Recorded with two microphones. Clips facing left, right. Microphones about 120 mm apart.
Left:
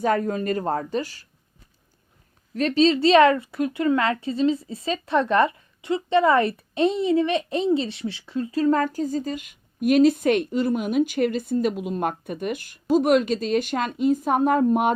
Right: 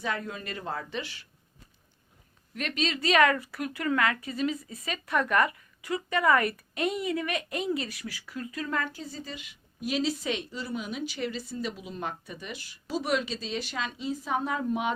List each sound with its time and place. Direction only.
0.0 s speech: 45° left (ahead or behind)
2.6 s speech: 30° left (ahead or behind); by 14.9 s 50° left (ahead or behind)